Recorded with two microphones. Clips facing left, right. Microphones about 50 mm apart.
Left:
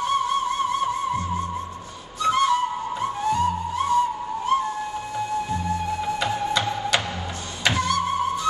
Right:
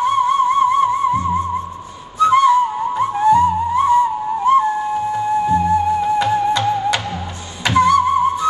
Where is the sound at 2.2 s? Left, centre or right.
Right.